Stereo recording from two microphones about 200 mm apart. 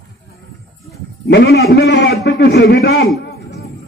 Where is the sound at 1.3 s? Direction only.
55° left (ahead or behind).